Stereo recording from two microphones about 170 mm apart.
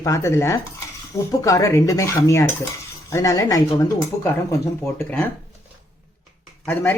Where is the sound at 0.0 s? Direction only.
15° left (ahead or behind).